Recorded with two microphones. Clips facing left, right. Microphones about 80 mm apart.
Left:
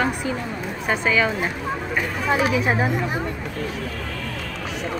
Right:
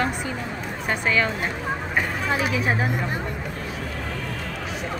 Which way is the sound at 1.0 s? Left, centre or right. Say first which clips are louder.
Left 2 dB; centre.